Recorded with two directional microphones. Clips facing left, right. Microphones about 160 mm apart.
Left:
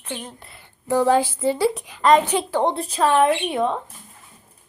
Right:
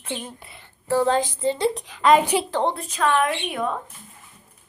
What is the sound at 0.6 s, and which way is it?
A woman's voice, 15° left (ahead or behind).